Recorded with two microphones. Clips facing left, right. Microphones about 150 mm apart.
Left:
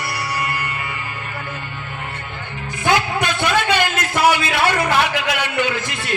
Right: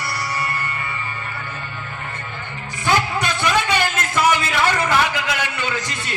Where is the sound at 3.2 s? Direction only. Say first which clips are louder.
Left 1 dB; 55° left (ahead or behind).